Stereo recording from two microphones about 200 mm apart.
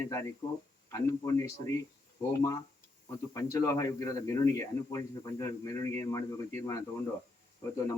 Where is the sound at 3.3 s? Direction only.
15° left (ahead or behind).